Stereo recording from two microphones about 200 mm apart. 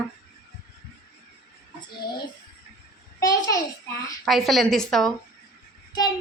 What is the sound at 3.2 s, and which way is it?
Speech, 20° left (ahead or behind).